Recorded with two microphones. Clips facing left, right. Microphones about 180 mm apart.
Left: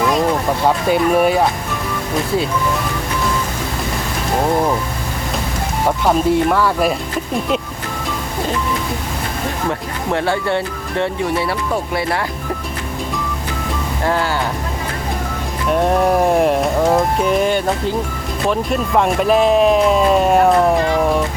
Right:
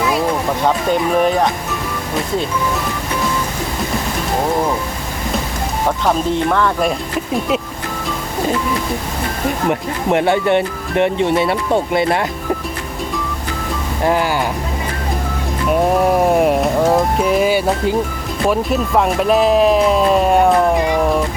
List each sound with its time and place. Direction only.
0.6 s speech: 5° left (ahead or behind)
6.1 s speech: 5° left (ahead or behind)
9.6 s speech: 20° right (ahead or behind)
14.0 s speech: 15° right (ahead or behind)
16.0 s speech: centre (ahead or behind)